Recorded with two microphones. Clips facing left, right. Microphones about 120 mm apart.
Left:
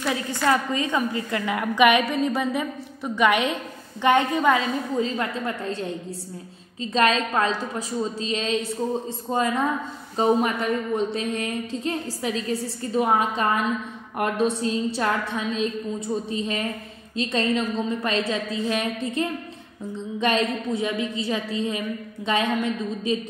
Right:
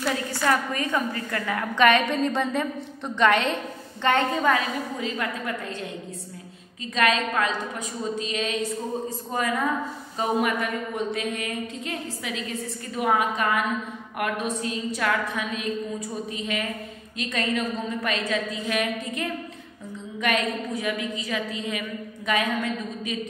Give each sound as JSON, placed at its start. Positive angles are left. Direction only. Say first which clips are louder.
{"t": 0.3, "sound": "a woman's voice", "louder": "left 4 dB", "side_deg": 20}